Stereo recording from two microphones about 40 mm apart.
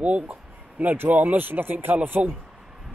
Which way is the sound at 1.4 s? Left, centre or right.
Right.